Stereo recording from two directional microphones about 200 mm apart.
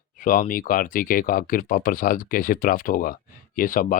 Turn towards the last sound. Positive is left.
turn(degrees=45)  # may be behind; listen again after turning